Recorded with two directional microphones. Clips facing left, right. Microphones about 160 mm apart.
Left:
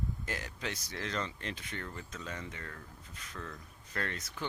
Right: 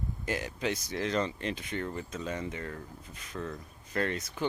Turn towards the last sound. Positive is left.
turn(degrees=-15)  # may be behind; listen again after turning